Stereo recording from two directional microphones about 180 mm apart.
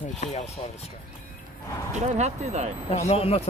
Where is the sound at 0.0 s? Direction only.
40° left (ahead or behind).